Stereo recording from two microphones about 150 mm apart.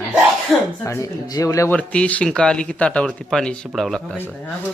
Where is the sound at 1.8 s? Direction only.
10° left (ahead or behind).